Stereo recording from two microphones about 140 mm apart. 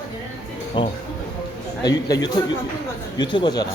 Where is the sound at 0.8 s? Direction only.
35° left (ahead or behind).